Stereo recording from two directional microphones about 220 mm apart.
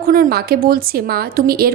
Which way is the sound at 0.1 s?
40° right (ahead or behind).